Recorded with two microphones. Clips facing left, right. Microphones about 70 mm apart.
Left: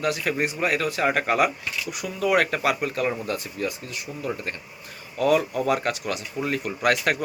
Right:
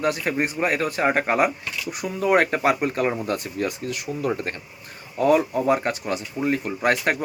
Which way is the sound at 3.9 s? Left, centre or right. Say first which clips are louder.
Right 6 dB; right.